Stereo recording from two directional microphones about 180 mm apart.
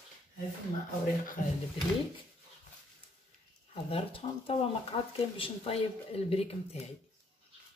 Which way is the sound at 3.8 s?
30° left (ahead or behind).